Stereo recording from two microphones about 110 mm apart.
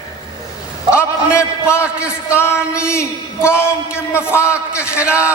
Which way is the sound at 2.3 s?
20° left (ahead or behind).